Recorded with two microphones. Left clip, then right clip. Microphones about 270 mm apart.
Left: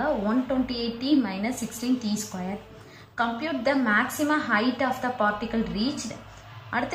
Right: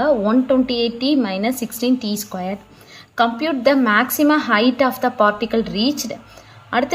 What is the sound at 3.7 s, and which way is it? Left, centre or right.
A woman's voice, right.